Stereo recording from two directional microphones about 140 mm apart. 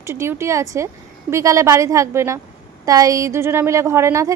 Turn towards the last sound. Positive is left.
turn(degrees=-20)  # may be behind; listen again after turning